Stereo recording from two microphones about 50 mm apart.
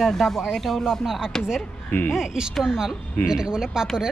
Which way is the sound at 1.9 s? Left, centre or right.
Left.